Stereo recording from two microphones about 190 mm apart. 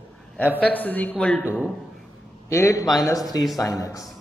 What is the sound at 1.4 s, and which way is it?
Speech, 5° right (ahead or behind).